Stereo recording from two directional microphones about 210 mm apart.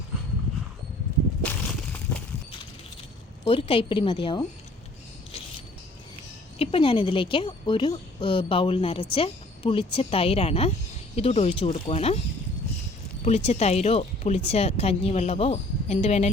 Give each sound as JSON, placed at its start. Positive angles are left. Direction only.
{"t": 1.4, "sound": "a sound", "side_deg": 5}
{"t": 3.4, "sound": "speech", "side_deg": 25}
{"t": 6.6, "sound": "speech", "side_deg": 25}
{"t": 13.2, "sound": "speech", "side_deg": 30}